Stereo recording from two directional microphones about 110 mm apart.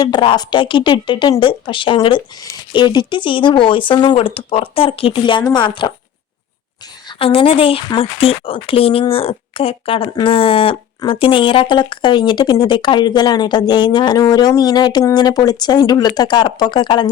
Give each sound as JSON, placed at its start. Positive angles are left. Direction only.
{"t": 0.0, "sound": "speech", "side_deg": 45}
{"t": 7.1, "sound": "speech", "side_deg": 55}